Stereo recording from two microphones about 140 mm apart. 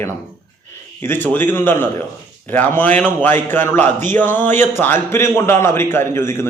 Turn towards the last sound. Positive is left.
turn(degrees=20)  # may be behind; listen again after turning